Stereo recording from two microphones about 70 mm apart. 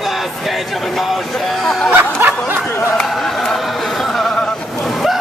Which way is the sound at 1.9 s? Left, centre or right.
Right.